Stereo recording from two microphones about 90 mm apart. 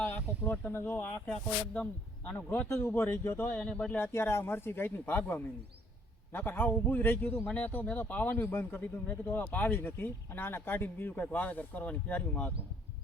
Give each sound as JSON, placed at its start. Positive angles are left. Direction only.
{"t": 0.0, "sound": "speech", "side_deg": 20}
{"t": 1.3, "sound": "a man's voice", "side_deg": 15}
{"t": 3.6, "sound": "speech", "side_deg": 10}
{"t": 3.9, "sound": "a man's voice", "side_deg": 25}